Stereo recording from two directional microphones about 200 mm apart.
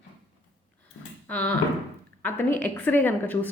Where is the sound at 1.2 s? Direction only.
5° left (ahead or behind).